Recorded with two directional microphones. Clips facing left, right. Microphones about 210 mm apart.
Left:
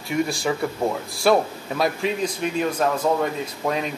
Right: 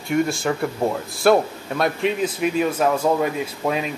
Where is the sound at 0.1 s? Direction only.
Centre (ahead or behind).